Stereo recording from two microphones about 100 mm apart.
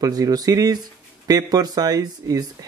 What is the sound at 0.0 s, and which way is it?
Speech, 40° right (ahead or behind).